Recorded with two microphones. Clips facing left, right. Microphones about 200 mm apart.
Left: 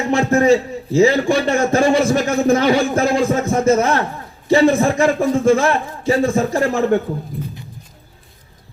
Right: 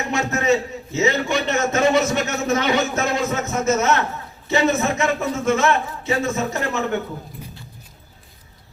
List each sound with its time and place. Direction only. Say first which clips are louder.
0.1 s a man's voice: left 7 dB; 30° left (ahead or behind)